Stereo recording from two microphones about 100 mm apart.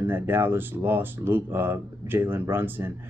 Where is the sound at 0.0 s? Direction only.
20° right (ahead or behind).